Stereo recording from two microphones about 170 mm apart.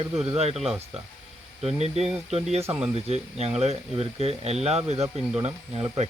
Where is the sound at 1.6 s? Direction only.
35° right (ahead or behind).